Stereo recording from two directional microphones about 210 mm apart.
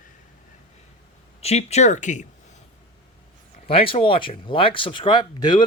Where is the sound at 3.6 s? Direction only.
25° left (ahead or behind).